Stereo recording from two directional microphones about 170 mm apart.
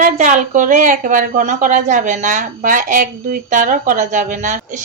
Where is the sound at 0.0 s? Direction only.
45° right (ahead or behind).